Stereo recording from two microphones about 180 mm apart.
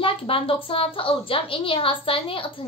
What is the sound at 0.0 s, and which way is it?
A woman's voice, 30° left (ahead or behind).